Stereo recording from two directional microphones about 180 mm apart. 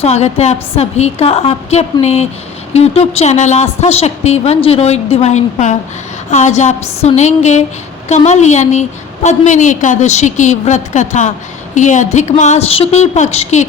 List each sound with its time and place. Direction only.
0.0 s a woman's voice: 35° left (ahead or behind)